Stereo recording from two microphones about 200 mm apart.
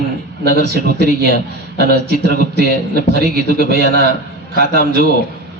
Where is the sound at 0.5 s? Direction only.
55° right (ahead or behind).